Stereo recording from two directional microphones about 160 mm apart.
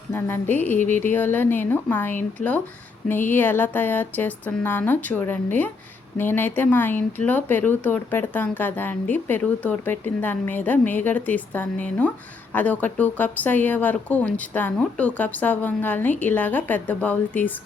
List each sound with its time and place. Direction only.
0.1 s speech: 15° left (ahead or behind)